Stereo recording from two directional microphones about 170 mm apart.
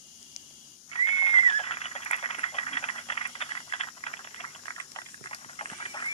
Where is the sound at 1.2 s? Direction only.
35° left (ahead or behind).